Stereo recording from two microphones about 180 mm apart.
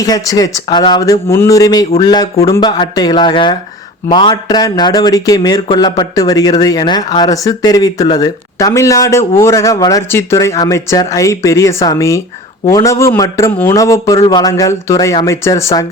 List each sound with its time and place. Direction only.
0.0 s a man's voice: 20° left (ahead or behind)